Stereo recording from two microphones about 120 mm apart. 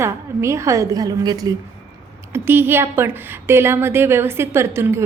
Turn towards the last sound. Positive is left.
turn(degrees=-20)  # may be behind; listen again after turning